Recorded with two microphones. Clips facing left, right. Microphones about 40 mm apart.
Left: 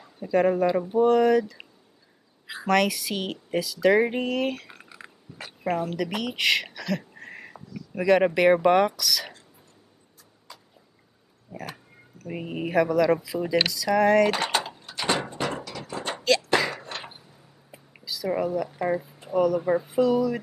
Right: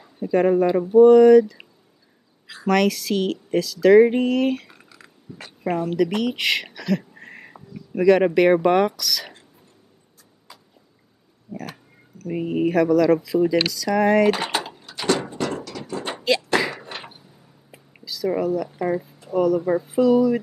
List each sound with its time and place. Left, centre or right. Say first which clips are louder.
0.0 s speech: right 3 dB; centre
4.8 s a sound: left 3 dB; left
5.4 s speech: right 3 dB; centre
10.5 s vehicle: even; centre
11.5 s speech: right 3 dB; centre
15.3 s a sound: right 3 dB; centre
16.0 s a sound: right 1 dB; centre
16.5 s door: right 2 dB; centre
17.9 s speech: right 3 dB; centre
19.9 s speech: right 7 dB; centre